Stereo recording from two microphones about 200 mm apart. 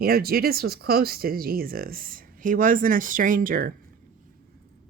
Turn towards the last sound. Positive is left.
turn(degrees=-45)  # may be behind; listen again after turning